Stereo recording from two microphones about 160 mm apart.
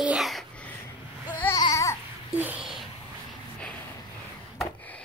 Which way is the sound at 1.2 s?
10° left (ahead or behind).